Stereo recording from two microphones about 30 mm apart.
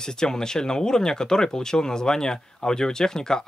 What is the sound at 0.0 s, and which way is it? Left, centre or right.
Speech, left.